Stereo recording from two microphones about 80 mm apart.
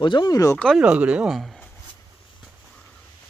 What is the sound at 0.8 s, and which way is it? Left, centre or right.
Speech, centre.